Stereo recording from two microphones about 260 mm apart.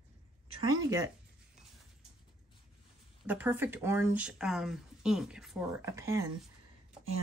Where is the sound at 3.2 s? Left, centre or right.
Centre.